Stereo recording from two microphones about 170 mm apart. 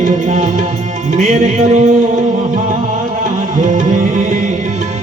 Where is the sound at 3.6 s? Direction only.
45° right (ahead or behind).